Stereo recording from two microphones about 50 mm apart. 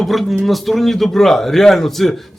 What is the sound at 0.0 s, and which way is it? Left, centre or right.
A man's voice, centre.